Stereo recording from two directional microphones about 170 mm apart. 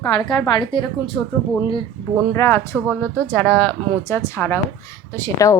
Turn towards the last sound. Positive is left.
turn(degrees=15)  # may be behind; listen again after turning